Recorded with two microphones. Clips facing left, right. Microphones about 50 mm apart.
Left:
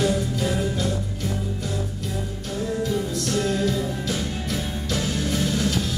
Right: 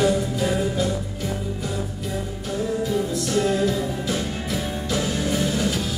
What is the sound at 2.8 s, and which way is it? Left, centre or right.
Music, centre.